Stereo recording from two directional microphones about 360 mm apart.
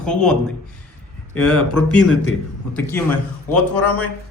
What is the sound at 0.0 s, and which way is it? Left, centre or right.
Speech, centre.